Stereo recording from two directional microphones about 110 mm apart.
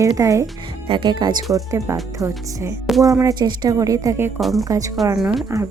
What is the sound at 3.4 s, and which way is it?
Speech, 40° right (ahead or behind).